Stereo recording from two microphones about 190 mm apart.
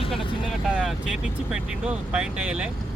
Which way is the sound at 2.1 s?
5° right (ahead or behind).